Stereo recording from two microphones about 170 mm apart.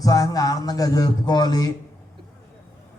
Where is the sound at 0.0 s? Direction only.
20° left (ahead or behind).